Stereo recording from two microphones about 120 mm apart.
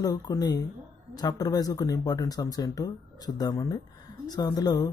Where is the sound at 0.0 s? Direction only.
35° left (ahead or behind).